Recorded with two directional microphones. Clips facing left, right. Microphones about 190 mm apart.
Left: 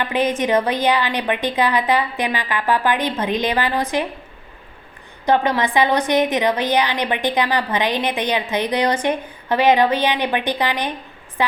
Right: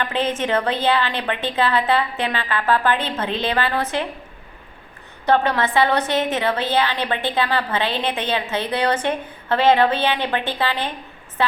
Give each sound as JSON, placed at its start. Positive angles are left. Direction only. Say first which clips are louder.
{"t": 0.1, "sound": "a woman's voice", "louder": "left 6 dB", "side_deg": 15}
{"t": 5.2, "sound": "a woman's voice", "louder": "left 1 dB", "side_deg": 15}